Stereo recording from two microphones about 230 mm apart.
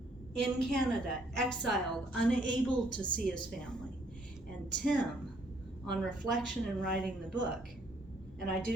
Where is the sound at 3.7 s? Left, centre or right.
Centre.